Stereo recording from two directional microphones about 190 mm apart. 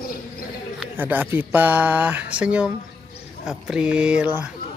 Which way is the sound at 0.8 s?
10° right (ahead or behind).